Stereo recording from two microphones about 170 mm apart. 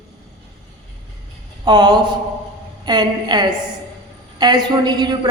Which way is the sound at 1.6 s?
25° right (ahead or behind).